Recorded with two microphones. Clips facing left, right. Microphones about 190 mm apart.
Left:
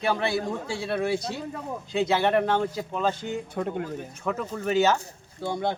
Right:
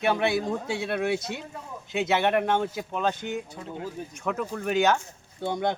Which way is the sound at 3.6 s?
60° left (ahead or behind).